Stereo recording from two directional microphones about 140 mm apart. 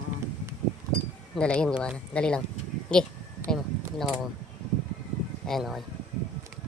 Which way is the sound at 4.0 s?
Centre (ahead or behind).